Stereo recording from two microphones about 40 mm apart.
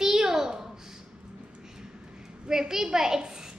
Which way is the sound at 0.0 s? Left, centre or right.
Centre.